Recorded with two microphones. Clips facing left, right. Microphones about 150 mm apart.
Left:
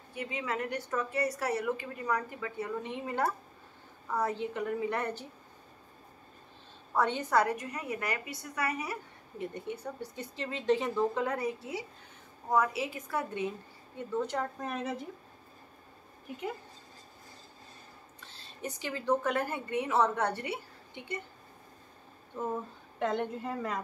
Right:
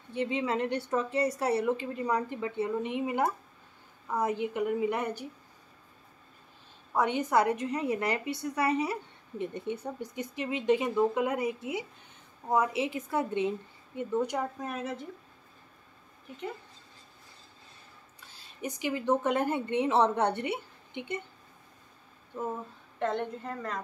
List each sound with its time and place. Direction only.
0.1 s a woman's voice: 30° right (ahead or behind)
6.9 s a woman's voice: 15° right (ahead or behind)
18.2 s speech: 15° right (ahead or behind)
22.9 s a woman's voice: centre (ahead or behind)